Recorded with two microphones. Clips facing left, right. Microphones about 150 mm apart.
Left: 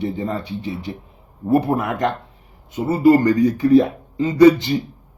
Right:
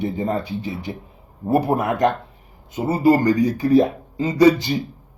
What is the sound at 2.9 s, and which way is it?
Speech, 15° right (ahead or behind).